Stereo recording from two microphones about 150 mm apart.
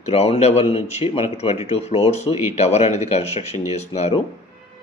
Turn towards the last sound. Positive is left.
turn(degrees=45)  # may be behind; listen again after turning